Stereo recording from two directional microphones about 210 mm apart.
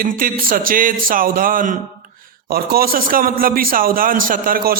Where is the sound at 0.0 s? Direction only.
40° right (ahead or behind).